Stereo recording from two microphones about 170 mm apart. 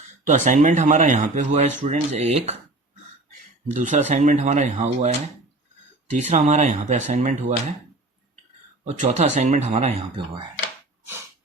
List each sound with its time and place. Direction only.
0.3 s speech: 45° right (ahead or behind)
3.7 s speech: 45° right (ahead or behind)
8.8 s speech: 45° right (ahead or behind)